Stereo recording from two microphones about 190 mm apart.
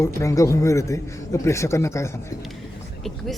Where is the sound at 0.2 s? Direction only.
15° left (ahead or behind).